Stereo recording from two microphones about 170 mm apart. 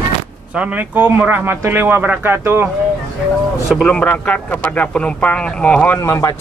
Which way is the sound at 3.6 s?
5° left (ahead or behind).